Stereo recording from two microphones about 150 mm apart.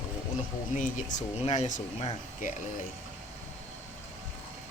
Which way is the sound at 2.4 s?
65° left (ahead or behind).